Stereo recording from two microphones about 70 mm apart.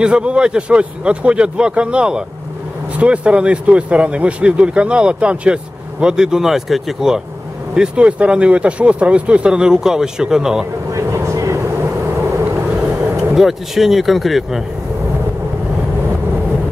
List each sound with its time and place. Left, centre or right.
0.0 s speech: centre
10.9 s vehicle: right
13.2 s speech: centre